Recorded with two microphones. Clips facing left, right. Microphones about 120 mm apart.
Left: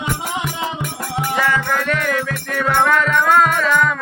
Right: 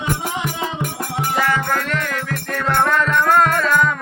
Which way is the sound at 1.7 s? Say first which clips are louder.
Left 3 dB; 5° left (ahead or behind).